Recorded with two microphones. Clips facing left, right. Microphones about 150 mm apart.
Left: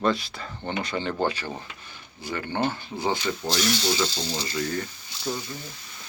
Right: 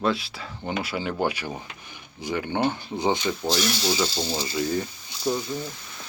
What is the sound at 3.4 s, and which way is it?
Speech, 5° right (ahead or behind).